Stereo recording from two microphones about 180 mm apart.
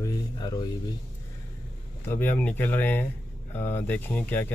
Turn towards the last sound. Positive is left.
turn(degrees=10)  # may be behind; listen again after turning